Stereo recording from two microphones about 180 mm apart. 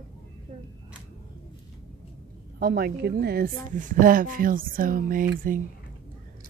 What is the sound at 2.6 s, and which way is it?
A woman's voice, 60° right (ahead or behind).